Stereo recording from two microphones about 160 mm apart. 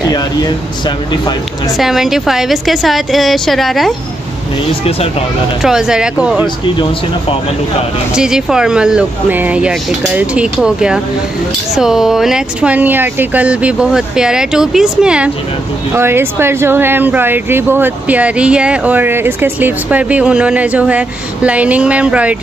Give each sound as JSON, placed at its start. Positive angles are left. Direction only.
{"t": 0.0, "sound": "speech", "side_deg": 25}
{"t": 1.8, "sound": "speech", "side_deg": 0}
{"t": 5.6, "sound": "speech", "side_deg": -5}
{"t": 6.6, "sound": "speech", "side_deg": 30}
{"t": 8.2, "sound": "speech", "side_deg": -5}